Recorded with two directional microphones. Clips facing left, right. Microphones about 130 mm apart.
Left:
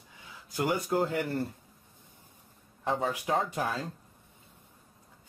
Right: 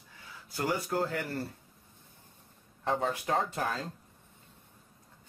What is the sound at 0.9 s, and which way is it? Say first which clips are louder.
Speech: left 3 dB; 15° left (ahead or behind).